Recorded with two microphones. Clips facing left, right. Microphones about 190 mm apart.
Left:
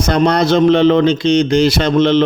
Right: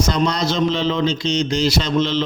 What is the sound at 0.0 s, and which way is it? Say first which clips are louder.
A man's voice: left 6 dB; 60° left (ahead or behind).